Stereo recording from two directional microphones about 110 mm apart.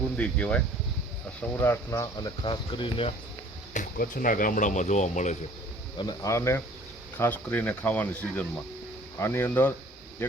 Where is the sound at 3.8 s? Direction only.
90° left.